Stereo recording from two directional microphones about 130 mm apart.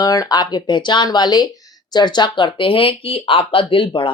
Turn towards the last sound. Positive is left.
turn(degrees=40)  # may be behind; listen again after turning